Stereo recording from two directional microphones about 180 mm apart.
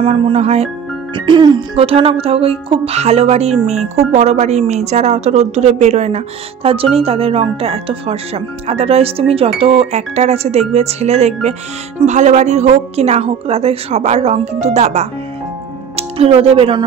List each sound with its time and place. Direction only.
0.0 s speech: 35° right (ahead or behind)